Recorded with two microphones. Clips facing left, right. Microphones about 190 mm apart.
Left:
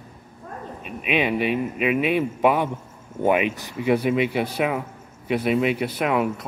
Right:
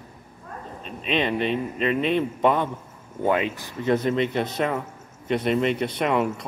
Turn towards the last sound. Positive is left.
turn(degrees=5)  # may be behind; listen again after turning